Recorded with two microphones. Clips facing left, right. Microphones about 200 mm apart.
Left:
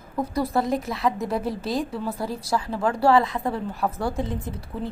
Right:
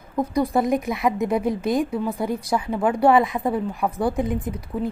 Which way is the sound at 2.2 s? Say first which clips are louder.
Right 3 dB; 20° right (ahead or behind).